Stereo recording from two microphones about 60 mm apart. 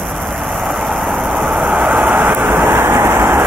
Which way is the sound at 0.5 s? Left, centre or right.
Centre.